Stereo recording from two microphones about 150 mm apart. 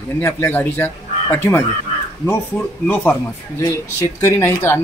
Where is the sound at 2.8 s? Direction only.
15° left (ahead or behind).